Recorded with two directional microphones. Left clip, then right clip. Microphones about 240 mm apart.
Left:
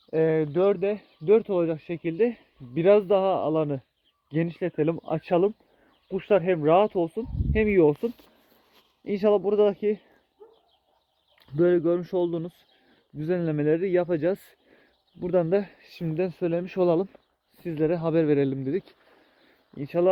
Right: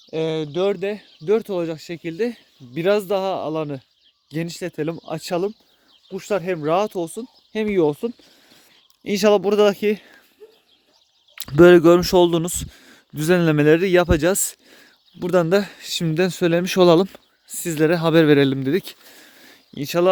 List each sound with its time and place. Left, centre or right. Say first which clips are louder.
0.1 s speech: even; right
9.0 s speech: right 6 dB; right
11.3 s speech: right 11 dB; right